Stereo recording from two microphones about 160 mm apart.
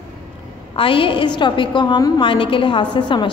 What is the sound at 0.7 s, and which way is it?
A woman's voice, 35° left (ahead or behind).